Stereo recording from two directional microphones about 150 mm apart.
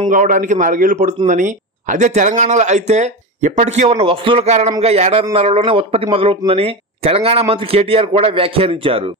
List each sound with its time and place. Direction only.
0.1 s a man's voice: 65° right (ahead or behind); by 9.0 s 40° right (ahead or behind)